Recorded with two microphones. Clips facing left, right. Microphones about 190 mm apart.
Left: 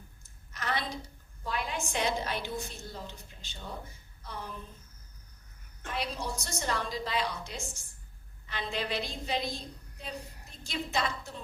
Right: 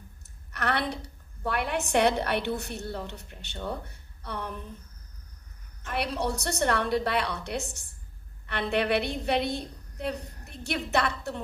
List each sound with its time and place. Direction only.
0.2 s a woman's voice: 65° right (ahead or behind)
5.9 s a woman's voice: 65° right (ahead or behind)